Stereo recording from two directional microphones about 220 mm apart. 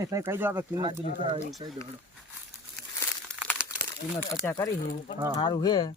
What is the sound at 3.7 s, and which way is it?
Crumpling, 15° left (ahead or behind).